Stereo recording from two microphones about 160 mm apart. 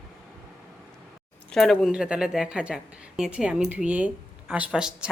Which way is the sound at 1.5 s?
Centre (ahead or behind).